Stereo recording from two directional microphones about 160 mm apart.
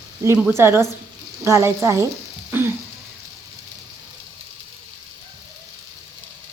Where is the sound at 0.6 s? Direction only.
15° right (ahead or behind).